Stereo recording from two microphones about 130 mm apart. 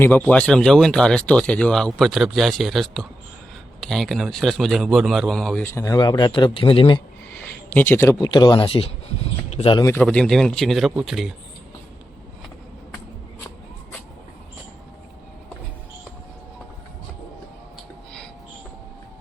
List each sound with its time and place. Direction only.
0.2 s speech: 10° left (ahead or behind)
5.6 s speech: 20° left (ahead or behind); by 7.0 s 40° left (ahead or behind)
7.7 s speech: 15° left (ahead or behind)
8.2 s speech: 35° left (ahead or behind)
10.0 s speech: 5° left (ahead or behind)